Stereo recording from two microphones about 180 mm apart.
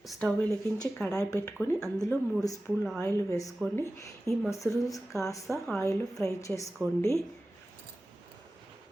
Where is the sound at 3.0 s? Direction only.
15° left (ahead or behind).